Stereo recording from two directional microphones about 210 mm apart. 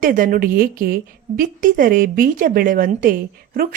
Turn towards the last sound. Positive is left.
turn(degrees=-45)  # may be behind; listen again after turning